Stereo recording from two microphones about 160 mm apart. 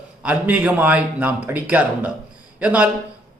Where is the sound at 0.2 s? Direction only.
10° right (ahead or behind).